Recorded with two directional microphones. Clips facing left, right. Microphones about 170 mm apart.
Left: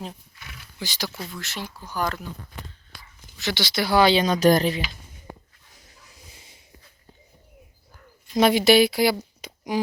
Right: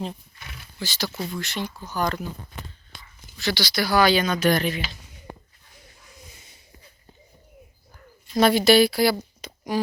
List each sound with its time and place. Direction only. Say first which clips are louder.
0.8 s speech: right 2 dB; 15° left (ahead or behind)
1.3 s speech: right 5 dB; centre (ahead or behind)
3.3 s speech: right 1 dB; 20° left (ahead or behind); by 4.8 s 35° left (ahead or behind)
8.3 s speech: even; 15° left (ahead or behind)